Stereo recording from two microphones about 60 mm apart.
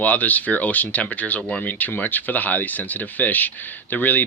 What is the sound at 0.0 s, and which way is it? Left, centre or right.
Speech, left.